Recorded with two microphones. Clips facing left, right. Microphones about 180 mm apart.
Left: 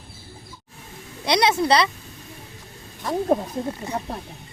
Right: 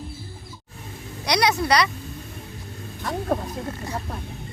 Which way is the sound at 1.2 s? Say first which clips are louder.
Left 2 dB; 25° left (ahead or behind).